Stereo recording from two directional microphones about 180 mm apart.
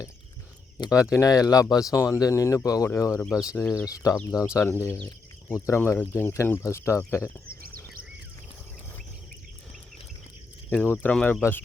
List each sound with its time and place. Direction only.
0.8 s speech: 20° left (ahead or behind)
3.2 s speech: 5° left (ahead or behind)
3.4 s speech: 20° left (ahead or behind)
7.4 s a sound: 55° right (ahead or behind)
10.7 s speech: 5° left (ahead or behind)